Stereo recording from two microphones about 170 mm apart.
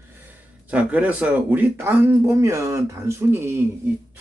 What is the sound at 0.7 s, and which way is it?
Speech, 10° right (ahead or behind).